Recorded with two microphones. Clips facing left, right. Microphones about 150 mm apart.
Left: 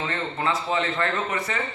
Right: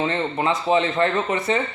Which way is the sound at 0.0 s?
20° right (ahead or behind).